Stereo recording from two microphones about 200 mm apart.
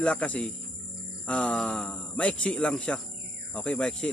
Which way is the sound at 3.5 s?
5° left (ahead or behind).